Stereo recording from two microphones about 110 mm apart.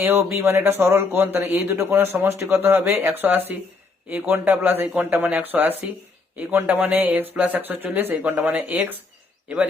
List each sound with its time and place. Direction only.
0.0 s speech: 20° right (ahead or behind)